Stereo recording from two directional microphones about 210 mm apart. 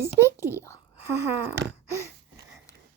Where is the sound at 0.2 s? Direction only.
10° left (ahead or behind).